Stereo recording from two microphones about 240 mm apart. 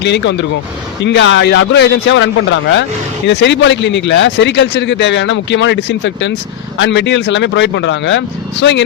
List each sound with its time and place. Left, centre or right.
0.0 s speech: left